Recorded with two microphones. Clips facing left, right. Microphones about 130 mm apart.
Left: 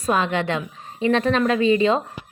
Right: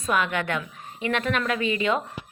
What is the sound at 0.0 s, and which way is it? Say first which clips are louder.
A woman's voice: left 4 dB; 30° left (ahead or behind).